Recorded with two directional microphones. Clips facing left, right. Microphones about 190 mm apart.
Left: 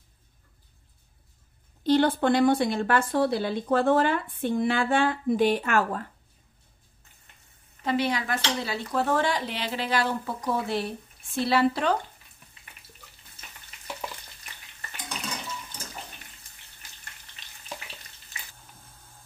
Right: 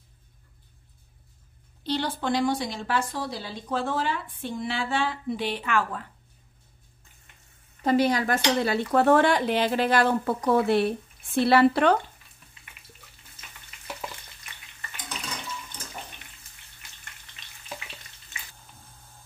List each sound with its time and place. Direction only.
1.8 s a woman's voice: 50° left (ahead or behind)
7.8 s speech: 40° right (ahead or behind)
8.6 s a woman's voice: 60° right (ahead or behind)